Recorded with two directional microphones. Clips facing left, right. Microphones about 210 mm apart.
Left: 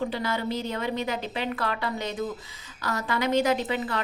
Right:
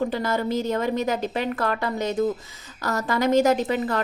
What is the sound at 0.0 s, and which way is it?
A woman's voice, 45° right (ahead or behind).